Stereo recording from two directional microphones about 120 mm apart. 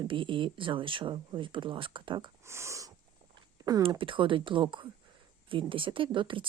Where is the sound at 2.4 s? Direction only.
20° right (ahead or behind).